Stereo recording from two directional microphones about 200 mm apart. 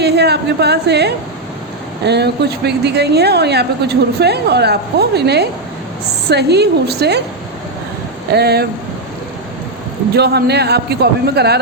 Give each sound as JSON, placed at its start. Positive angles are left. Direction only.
{"t": 0.0, "sound": "speech", "side_deg": -55}
{"t": 8.3, "sound": "speech", "side_deg": -55}
{"t": 10.2, "sound": "speech", "side_deg": -55}